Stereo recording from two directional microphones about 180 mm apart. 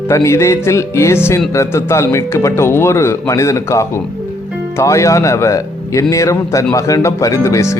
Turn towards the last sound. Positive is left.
turn(degrees=15)  # may be behind; listen again after turning